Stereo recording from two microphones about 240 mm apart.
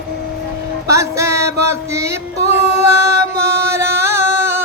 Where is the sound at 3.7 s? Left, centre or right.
Centre.